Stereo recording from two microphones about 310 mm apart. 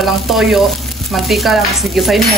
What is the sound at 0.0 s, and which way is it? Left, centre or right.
Chopping, centre.